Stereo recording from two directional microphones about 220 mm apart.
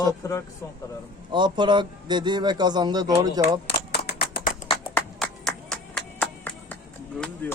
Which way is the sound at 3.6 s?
45° left (ahead or behind).